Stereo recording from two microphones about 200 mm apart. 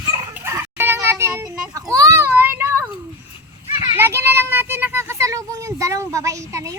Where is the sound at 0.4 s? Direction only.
10° right (ahead or behind).